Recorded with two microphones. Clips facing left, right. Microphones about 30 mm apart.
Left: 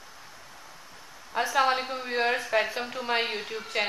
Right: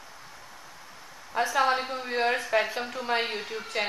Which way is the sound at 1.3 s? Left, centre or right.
Centre.